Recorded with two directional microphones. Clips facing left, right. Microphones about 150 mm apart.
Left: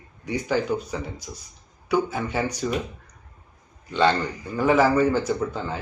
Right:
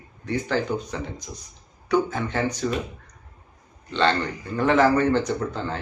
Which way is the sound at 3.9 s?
10° left (ahead or behind).